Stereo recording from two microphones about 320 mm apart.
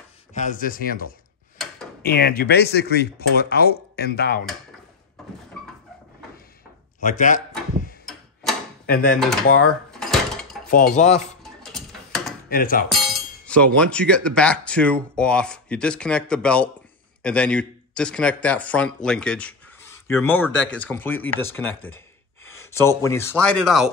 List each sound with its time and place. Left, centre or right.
0.3 s speech: left
7.0 s a sound: left
8.8 s speech: left
9.8 s dishes: centre
11.0 s speech: left
11.6 s a sound: centre
12.4 s speech: left
12.8 s speech: centre
22.6 s speech: centre